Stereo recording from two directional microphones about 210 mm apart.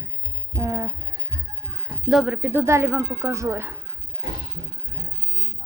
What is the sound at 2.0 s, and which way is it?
Speech, centre (ahead or behind).